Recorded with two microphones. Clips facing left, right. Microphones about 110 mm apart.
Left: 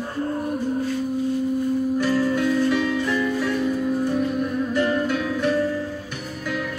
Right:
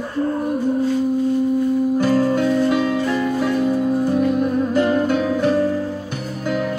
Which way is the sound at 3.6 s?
45° right (ahead or behind).